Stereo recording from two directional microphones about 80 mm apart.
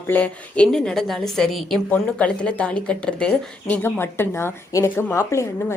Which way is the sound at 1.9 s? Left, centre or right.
Centre.